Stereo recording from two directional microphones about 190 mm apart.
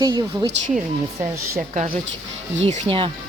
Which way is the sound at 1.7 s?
45° right (ahead or behind).